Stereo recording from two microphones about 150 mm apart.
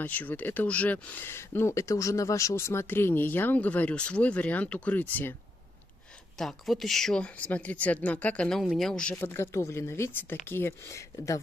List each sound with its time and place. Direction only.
0.0 s speech: 10° left (ahead or behind)
6.3 s speech: centre (ahead or behind)
9.1 s speech: 15° left (ahead or behind)